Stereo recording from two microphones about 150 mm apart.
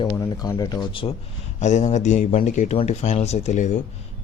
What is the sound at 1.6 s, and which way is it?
A man's voice, 50° left (ahead or behind).